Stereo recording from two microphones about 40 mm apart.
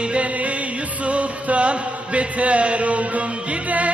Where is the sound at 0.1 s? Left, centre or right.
Right.